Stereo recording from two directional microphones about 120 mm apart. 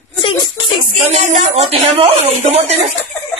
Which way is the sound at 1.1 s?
75° right (ahead or behind).